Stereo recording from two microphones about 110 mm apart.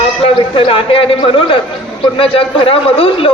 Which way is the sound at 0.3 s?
55° left (ahead or behind).